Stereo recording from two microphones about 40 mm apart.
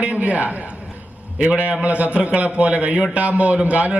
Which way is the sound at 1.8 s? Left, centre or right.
Right.